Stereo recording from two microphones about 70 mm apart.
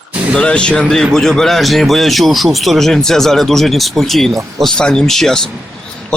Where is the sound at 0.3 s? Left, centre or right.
Centre.